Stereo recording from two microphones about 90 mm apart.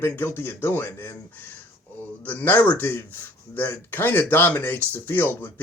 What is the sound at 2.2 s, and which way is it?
Speech, 20° left (ahead or behind).